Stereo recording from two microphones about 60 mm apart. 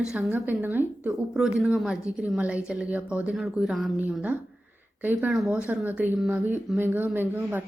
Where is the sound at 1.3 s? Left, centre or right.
Centre.